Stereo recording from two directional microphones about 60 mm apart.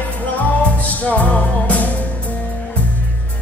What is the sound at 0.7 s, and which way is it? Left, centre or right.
Music, left.